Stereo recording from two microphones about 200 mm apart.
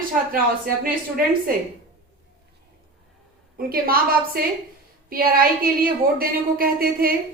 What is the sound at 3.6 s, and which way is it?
Speech, 50° right (ahead or behind).